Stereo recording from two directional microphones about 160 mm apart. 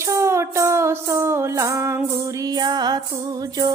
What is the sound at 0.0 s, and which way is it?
Music, 15° right (ahead or behind).